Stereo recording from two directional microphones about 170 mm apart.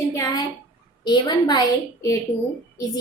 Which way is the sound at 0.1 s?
20° left (ahead or behind).